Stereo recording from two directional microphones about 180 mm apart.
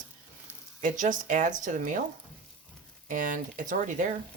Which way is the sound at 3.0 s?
45° right (ahead or behind).